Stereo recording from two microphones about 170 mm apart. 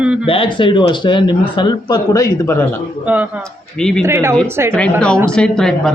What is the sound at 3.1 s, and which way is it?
Speech, 10° right (ahead or behind).